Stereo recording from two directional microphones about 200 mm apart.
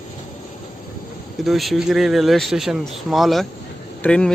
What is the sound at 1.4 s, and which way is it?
Speech, centre (ahead or behind).